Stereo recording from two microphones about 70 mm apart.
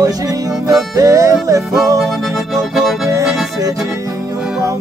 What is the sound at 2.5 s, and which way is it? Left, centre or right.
Music, centre.